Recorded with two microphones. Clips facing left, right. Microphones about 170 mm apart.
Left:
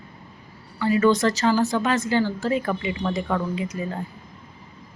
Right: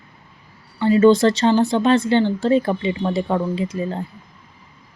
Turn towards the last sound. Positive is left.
turn(degrees=-30)  # may be behind; listen again after turning